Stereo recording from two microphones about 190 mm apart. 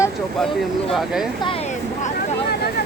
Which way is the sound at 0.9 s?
Centre (ahead or behind).